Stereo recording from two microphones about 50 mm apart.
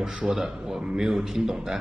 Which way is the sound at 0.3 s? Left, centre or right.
Centre.